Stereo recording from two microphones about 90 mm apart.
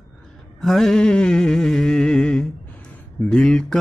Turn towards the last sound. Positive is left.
turn(degrees=10)  # may be behind; listen again after turning